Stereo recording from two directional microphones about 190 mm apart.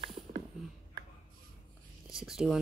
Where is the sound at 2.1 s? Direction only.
Centre (ahead or behind).